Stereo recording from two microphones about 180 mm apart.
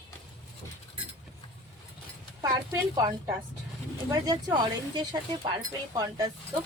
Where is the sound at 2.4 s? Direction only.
20° right (ahead or behind).